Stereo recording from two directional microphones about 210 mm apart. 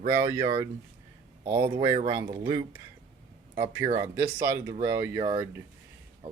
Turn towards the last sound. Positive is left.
turn(degrees=-30)  # may be behind; listen again after turning